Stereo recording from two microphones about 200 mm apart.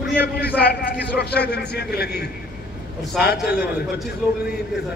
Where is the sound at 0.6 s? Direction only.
55° left (ahead or behind).